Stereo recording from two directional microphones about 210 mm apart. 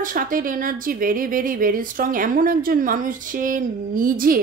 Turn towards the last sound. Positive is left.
turn(degrees=-40)  # may be behind; listen again after turning